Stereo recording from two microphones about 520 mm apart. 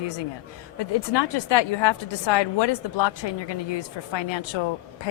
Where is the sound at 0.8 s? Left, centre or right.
Left.